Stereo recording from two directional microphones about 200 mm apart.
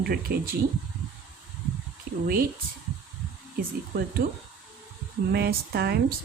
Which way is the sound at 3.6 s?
45° right (ahead or behind).